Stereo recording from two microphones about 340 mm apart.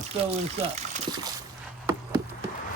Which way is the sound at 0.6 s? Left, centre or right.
Right.